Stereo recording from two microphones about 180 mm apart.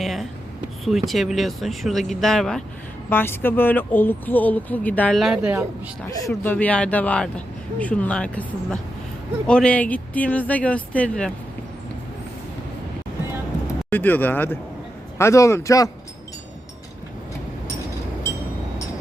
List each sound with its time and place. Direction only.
0.0 s a sound: centre (ahead or behind)
0.9 s speech: centre (ahead or behind)
6.1 s speech: 15° left (ahead or behind)
13.9 s speech: 10° left (ahead or behind)